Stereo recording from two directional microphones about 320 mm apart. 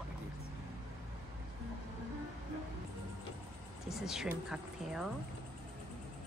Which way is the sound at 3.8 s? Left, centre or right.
Centre.